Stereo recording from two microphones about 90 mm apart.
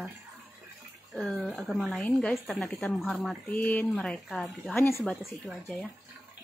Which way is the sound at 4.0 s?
5° left (ahead or behind).